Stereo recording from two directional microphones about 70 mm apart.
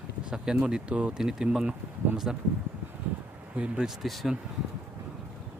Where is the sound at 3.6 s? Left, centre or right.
Right.